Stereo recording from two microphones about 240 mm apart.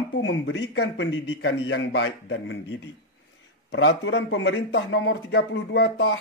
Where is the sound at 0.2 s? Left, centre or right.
Left.